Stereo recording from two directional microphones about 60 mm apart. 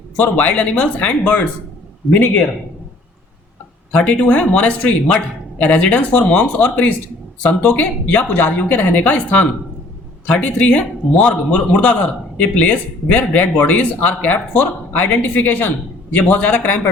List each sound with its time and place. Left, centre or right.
0.2 s speech: left
3.9 s speech: centre